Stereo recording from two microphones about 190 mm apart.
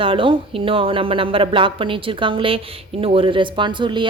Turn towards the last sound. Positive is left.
turn(degrees=-25)  # may be behind; listen again after turning